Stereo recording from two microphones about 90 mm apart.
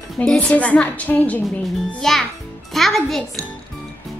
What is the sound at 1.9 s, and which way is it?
A child's voice, 5° left (ahead or behind).